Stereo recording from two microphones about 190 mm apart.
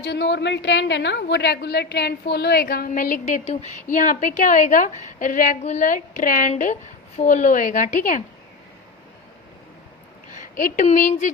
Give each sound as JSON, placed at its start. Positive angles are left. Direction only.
{"t": 0.0, "sound": "a woman's voice", "side_deg": 65}
{"t": 10.3, "sound": "speech", "side_deg": 45}